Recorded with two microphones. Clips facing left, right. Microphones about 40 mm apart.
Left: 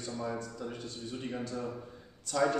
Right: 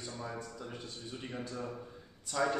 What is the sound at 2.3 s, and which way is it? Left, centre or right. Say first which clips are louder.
Speech: left 3 dB; centre.